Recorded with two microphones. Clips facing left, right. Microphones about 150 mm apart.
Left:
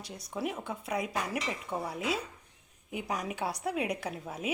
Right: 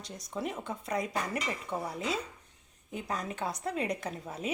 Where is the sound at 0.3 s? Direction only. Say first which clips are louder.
Left 1 dB; 5° left (ahead or behind).